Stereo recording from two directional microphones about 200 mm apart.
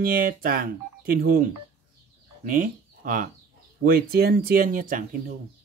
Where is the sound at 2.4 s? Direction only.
45° right (ahead or behind).